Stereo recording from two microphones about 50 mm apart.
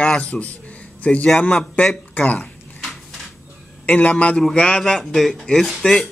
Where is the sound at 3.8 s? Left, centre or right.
Left.